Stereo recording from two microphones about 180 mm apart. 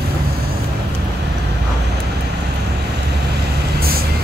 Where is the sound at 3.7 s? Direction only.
55° right (ahead or behind).